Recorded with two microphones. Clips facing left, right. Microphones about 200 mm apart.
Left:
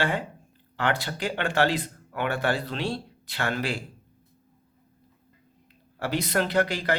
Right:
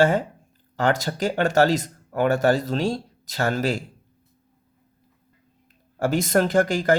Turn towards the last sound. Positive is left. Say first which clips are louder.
# right 6 dB
turn(degrees=-45)  # may be behind; listen again after turning